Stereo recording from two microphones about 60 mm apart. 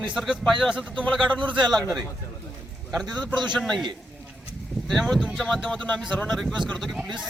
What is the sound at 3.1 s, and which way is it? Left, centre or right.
Speech, left.